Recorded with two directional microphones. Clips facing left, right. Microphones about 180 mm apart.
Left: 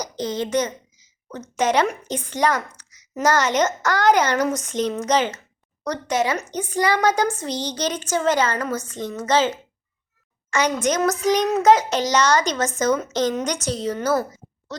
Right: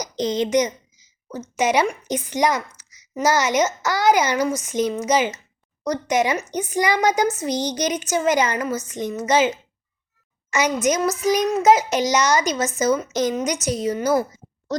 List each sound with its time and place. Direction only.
0.0 s a woman's voice: 15° right (ahead or behind)
11.4 s child singing: centre (ahead or behind)
11.7 s a woman's voice: 10° right (ahead or behind)
14.7 s speech: 40° right (ahead or behind)